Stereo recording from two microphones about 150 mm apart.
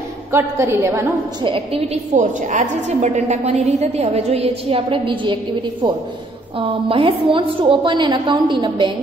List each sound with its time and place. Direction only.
0.3 s a woman's voice: 15° right (ahead or behind)
1.4 s a woman's voice: 35° right (ahead or behind)
2.1 s a woman's voice: 55° right (ahead or behind); by 8.9 s 30° right (ahead or behind)